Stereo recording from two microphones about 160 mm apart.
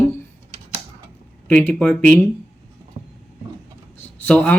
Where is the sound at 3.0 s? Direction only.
30° right (ahead or behind).